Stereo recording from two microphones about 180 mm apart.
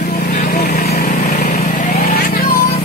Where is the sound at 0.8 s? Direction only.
60° left (ahead or behind).